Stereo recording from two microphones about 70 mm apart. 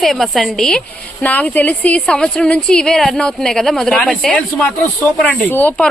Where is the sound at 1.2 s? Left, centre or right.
Left; by 3.9 s centre.